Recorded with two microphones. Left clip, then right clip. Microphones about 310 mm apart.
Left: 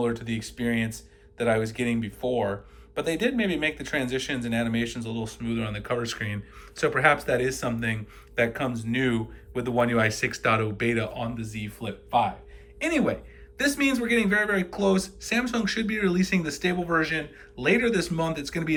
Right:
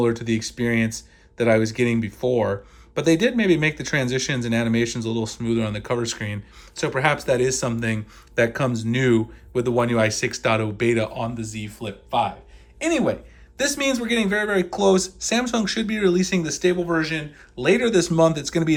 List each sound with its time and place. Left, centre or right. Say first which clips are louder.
0.0 s speech: right 6 dB; centre